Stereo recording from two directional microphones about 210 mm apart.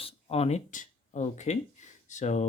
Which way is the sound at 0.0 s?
30° left (ahead or behind).